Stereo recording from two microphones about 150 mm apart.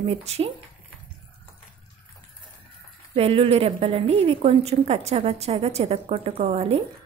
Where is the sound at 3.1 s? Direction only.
40° right (ahead or behind).